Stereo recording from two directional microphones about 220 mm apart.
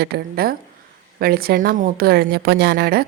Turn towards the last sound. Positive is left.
turn(degrees=-45)  # may be behind; listen again after turning